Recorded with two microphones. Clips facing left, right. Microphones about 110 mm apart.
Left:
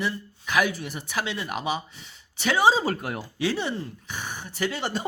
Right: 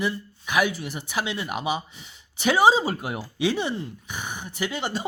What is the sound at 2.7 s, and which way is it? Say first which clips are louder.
Speech: right 1 dB; 10° right (ahead or behind).